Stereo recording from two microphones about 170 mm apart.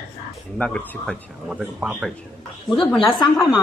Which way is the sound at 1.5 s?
5° right (ahead or behind).